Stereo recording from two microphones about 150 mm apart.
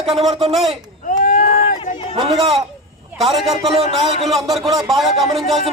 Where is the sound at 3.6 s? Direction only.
40° right (ahead or behind).